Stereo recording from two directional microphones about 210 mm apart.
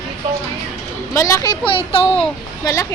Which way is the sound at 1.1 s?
15° left (ahead or behind).